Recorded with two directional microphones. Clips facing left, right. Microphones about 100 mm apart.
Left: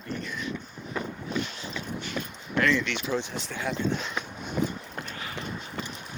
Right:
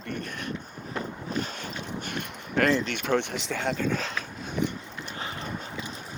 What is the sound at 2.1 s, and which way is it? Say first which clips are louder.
Speech: right 2 dB; 50° right (ahead or behind).